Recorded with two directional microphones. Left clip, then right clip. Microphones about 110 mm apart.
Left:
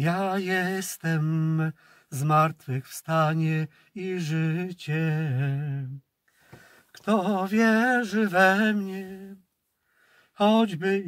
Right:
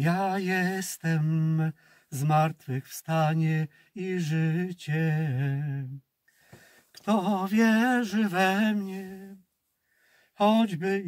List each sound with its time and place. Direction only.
0.0 s mantra: 30° left (ahead or behind)
6.9 s a sound: 15° left (ahead or behind)
10.3 s speech: 25° left (ahead or behind)